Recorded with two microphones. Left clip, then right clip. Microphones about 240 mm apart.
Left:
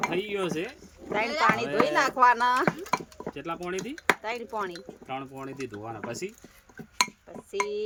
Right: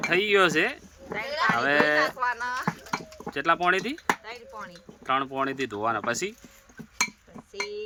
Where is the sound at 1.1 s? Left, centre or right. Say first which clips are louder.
Left 1 dB; left.